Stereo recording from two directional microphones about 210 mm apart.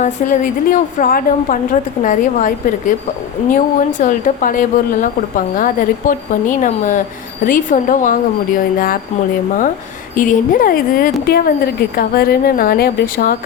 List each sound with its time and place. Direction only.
0.0 s a woman's voice: 40° left (ahead or behind)
10.2 s speech: 40° left (ahead or behind)